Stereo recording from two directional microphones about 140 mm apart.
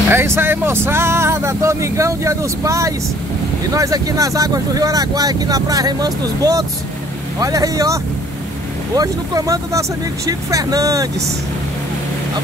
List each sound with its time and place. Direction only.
0.1 s speech: 15° right (ahead or behind)